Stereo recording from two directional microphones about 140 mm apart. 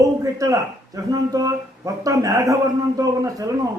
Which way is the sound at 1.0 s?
25° right (ahead or behind).